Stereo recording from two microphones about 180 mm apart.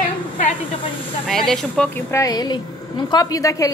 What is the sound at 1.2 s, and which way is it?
Speech, centre (ahead or behind).